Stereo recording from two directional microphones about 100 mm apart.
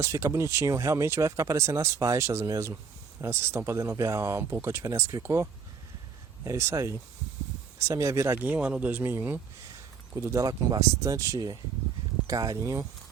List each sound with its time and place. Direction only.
0.0 s speech: 30° right (ahead or behind)
8.4 s speech: 15° right (ahead or behind)
10.2 s speech: 30° right (ahead or behind)